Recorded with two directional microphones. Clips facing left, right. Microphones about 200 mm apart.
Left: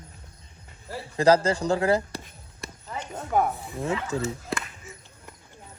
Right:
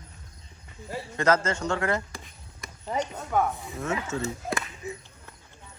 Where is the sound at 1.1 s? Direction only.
35° left (ahead or behind).